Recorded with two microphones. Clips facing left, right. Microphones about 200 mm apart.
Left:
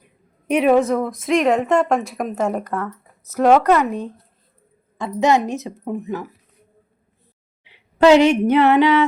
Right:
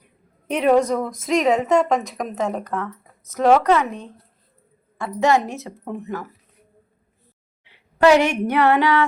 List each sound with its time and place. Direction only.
0.4 s a woman's voice: 10° left (ahead or behind)
4.9 s speech: 20° left (ahead or behind)
7.6 s speech: 20° left (ahead or behind)